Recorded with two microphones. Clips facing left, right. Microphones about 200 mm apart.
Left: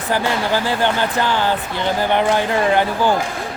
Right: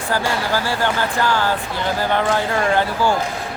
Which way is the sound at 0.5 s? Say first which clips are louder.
Left 2 dB; 20° left (ahead or behind).